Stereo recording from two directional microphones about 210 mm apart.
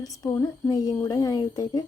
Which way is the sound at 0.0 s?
15° left (ahead or behind).